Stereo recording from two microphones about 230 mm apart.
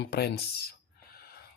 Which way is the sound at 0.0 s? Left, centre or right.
Left.